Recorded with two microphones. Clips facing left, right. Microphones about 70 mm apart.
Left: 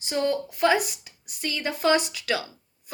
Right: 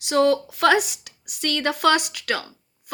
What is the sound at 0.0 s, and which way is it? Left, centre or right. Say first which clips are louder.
A woman's voice: right 7 dB; right.